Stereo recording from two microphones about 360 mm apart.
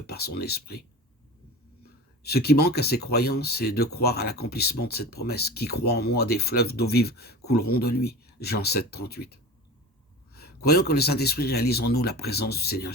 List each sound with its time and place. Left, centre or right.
0.1 s speech: left
1.8 s speech: left